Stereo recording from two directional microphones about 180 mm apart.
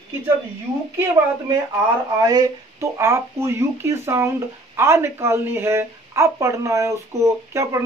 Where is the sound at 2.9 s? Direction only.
15° right (ahead or behind).